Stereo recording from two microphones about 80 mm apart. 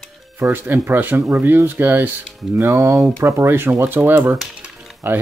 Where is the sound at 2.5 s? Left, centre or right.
Right.